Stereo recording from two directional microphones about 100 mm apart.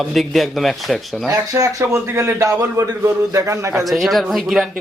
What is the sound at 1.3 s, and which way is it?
A man's voice, 35° right (ahead or behind).